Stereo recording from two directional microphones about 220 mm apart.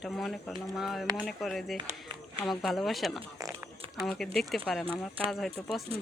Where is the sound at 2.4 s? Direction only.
Centre (ahead or behind).